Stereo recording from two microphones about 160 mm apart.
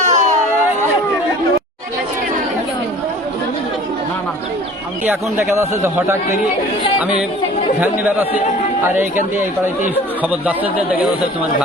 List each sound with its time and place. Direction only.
0.0 s a sound: 50° right (ahead or behind)
5.0 s a man's voice: 15° right (ahead or behind)
7.8 s a man's voice: 10° right (ahead or behind)
10.4 s a man's voice: 10° right (ahead or behind)